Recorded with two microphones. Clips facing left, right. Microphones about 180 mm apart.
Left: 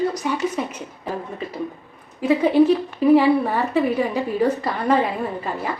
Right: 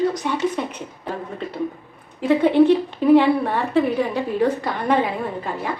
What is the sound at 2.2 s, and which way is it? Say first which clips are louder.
Speech: right 1 dB; 5° left (ahead or behind).